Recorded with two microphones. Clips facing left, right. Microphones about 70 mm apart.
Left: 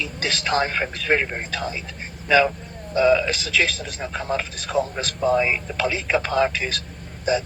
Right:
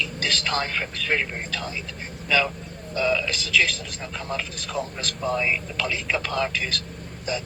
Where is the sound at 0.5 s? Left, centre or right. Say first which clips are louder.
Left 5 dB; left.